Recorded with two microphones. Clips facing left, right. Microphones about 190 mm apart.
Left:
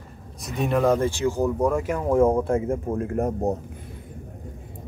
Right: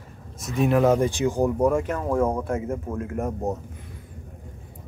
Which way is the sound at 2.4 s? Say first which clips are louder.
Left 4 dB; 30° left (ahead or behind).